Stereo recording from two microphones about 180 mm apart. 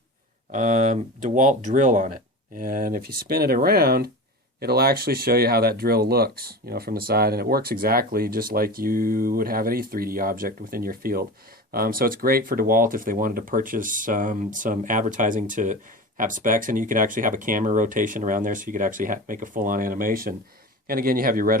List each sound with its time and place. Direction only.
0.5 s speech: 45° right (ahead or behind)